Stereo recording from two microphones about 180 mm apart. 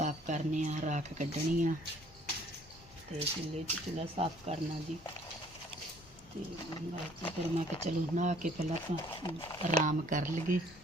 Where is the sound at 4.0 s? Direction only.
35° right (ahead or behind).